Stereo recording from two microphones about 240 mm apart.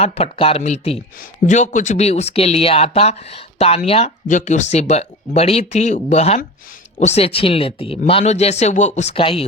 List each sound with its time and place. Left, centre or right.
0.0 s speech: left